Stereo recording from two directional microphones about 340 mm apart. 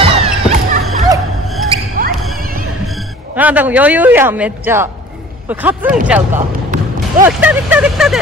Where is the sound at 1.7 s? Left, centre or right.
Right.